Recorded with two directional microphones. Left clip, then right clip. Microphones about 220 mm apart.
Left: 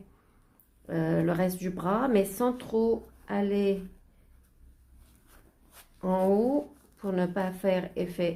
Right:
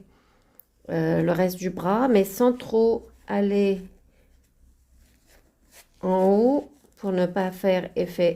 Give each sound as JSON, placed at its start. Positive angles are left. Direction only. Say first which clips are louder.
{"t": 0.9, "sound": "a woman's voice", "louder": "right 5 dB", "side_deg": -40}
{"t": 6.0, "sound": "a woman's voice", "louder": "right 6 dB", "side_deg": -35}